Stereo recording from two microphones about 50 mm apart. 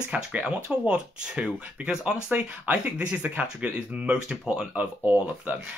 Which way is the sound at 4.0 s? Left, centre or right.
Centre.